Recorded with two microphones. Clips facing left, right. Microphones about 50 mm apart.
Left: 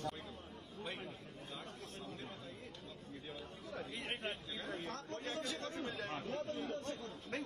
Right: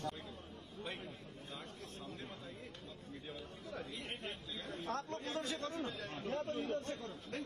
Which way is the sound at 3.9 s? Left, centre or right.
Left.